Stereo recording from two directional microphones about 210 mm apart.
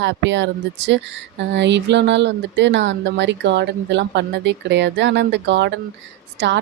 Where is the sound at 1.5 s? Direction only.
55° right (ahead or behind).